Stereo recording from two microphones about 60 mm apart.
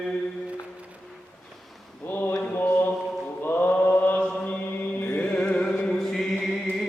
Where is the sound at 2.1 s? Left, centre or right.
Left.